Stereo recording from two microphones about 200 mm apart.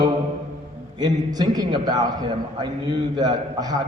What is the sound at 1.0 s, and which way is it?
A man's voice, 20° right (ahead or behind).